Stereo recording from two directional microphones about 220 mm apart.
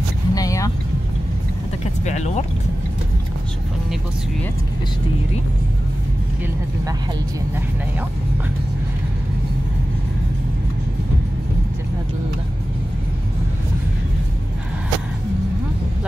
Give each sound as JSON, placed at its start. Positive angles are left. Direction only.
{"t": 0.3, "sound": "vehicle", "side_deg": 15}
{"t": 2.0, "sound": "speech", "side_deg": 30}